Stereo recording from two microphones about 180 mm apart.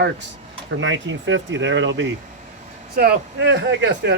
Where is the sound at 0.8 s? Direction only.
90° right.